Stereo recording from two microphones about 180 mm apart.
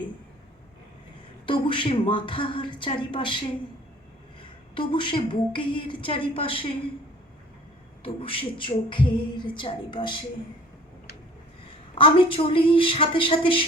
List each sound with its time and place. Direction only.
1.5 s a woman's voice: 30° left (ahead or behind)
4.7 s a woman's voice: 25° left (ahead or behind)
8.0 s a woman's voice: 30° left (ahead or behind)
11.9 s a woman's voice: 30° left (ahead or behind)